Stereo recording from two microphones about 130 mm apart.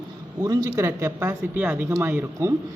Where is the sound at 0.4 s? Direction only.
25° right (ahead or behind).